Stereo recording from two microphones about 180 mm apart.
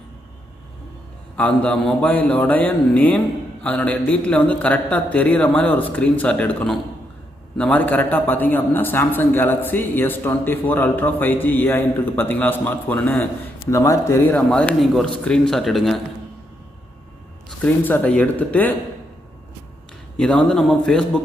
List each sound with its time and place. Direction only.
1.4 s a man's voice: 10° left (ahead or behind)
17.6 s a man's voice: 10° left (ahead or behind)
20.1 s a man's voice: 5° left (ahead or behind)